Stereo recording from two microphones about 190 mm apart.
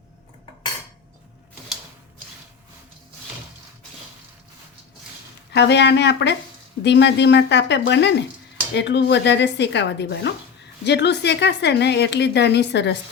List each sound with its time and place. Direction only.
5.5 s a woman's voice: 65° left (ahead or behind)
6.8 s dishes: 65° left (ahead or behind)
10.8 s a woman's voice: 65° left (ahead or behind)